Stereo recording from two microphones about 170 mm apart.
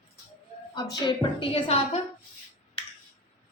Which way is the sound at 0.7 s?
25° left (ahead or behind).